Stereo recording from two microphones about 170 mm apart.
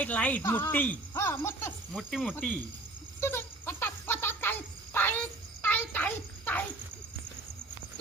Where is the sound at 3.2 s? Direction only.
15° left (ahead or behind).